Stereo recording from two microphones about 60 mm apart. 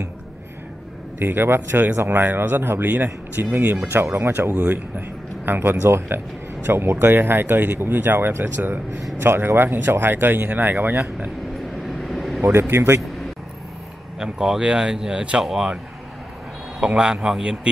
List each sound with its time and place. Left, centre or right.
1.2 s a man's voice: right
11.8 s vehicle: centre
12.5 s speech: right
14.2 s speech: centre
16.8 s speech: centre